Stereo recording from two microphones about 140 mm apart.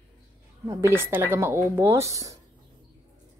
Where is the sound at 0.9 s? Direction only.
15° right (ahead or behind).